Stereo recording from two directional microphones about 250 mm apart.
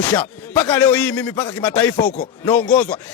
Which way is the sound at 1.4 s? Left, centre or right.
Centre.